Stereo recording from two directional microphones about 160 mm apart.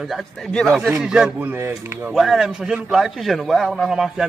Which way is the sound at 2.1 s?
Centre (ahead or behind).